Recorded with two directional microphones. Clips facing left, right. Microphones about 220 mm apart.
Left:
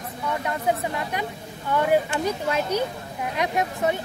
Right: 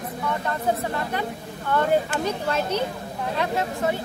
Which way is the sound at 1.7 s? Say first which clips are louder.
Even; 10° left (ahead or behind).